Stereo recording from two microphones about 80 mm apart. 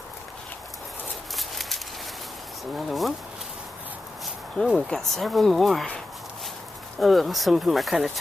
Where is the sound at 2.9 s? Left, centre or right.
Centre.